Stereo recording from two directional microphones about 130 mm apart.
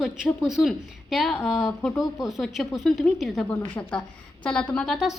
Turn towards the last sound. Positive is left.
turn(degrees=0)  # may be behind; listen again after turning